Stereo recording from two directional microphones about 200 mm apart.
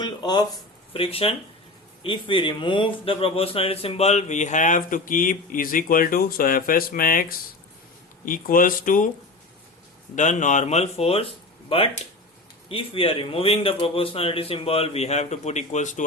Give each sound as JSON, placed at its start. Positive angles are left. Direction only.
{"t": 0.0, "sound": "a man's voice", "side_deg": 20}
{"t": 10.2, "sound": "a man's voice", "side_deg": 40}